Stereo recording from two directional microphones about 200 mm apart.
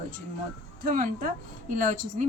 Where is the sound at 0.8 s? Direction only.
45° right (ahead or behind).